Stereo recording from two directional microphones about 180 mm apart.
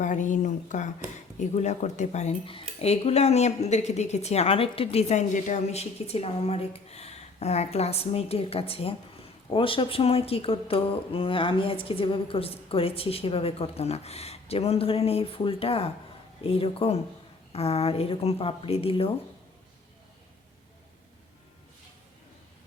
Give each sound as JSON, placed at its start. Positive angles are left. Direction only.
{"t": 0.0, "sound": "a woman's voice", "side_deg": 45}